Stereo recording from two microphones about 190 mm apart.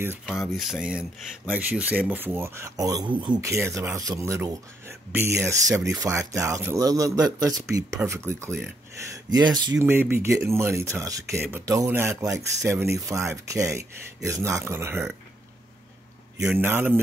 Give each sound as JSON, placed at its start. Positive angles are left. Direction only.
{"t": 0.2, "sound": "speech", "side_deg": 0}
{"t": 16.3, "sound": "speech", "side_deg": -10}